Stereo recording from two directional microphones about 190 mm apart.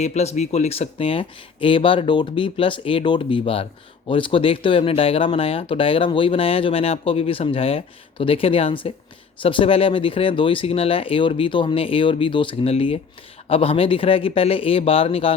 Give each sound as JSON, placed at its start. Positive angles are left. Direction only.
{"t": 0.0, "sound": "speech", "side_deg": 35}